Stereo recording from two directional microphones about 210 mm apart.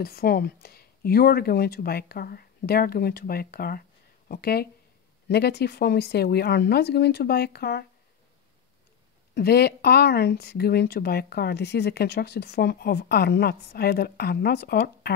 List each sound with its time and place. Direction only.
0.0 s speech: 45° left (ahead or behind)
9.3 s speech: 50° left (ahead or behind)